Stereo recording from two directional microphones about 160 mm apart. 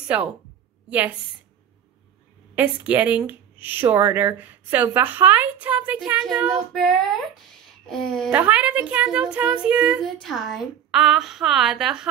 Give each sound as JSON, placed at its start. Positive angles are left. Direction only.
{"t": 0.8, "sound": "a woman's voice", "side_deg": -10}
{"t": 2.5, "sound": "a woman's voice", "side_deg": -10}
{"t": 8.3, "sound": "a woman's voice", "side_deg": -10}